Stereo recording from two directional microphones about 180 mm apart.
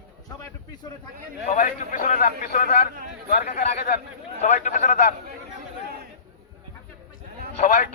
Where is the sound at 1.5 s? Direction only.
50° left (ahead or behind).